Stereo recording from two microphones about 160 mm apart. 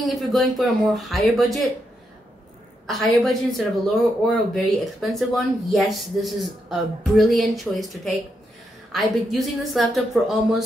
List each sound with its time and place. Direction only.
0.0 s speech: centre (ahead or behind)
2.9 s speech: centre (ahead or behind)